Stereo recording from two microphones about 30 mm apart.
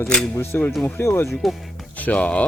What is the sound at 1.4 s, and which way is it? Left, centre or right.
Speech, centre.